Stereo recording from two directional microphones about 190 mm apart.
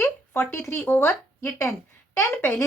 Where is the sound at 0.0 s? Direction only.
15° left (ahead or behind).